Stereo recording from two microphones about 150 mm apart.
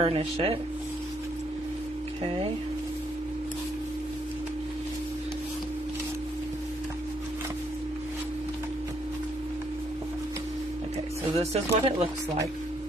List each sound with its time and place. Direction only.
0.0 s speech: 40° right (ahead or behind)
11.3 s speech: 45° right (ahead or behind)